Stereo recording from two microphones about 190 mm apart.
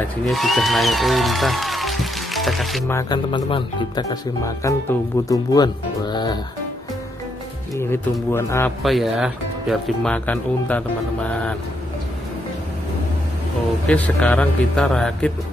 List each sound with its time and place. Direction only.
0.3 s speech: centre (ahead or behind)
2.9 s speech: 20° left (ahead or behind)
8.3 s speech: 15° left (ahead or behind)
8.8 s speech: centre (ahead or behind)
13.8 s speech: 10° left (ahead or behind)